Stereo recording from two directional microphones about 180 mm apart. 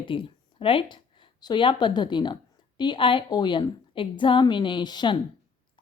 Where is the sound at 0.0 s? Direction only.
30° left (ahead or behind).